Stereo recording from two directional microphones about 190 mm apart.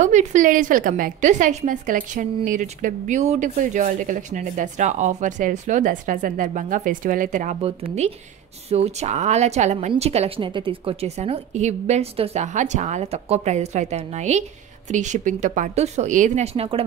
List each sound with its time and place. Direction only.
0.0 s a woman's voice: 40° right (ahead or behind)